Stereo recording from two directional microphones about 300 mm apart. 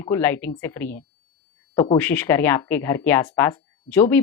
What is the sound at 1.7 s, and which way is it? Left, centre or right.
Speech, centre.